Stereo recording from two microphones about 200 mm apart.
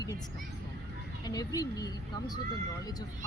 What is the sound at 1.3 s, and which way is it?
Speech, 20° left (ahead or behind).